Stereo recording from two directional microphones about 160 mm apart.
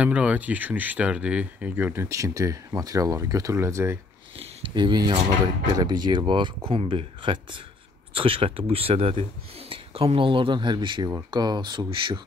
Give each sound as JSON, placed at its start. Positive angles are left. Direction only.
{"t": 0.0, "sound": "speech", "side_deg": -10}
{"t": 4.4, "sound": "speech", "side_deg": -30}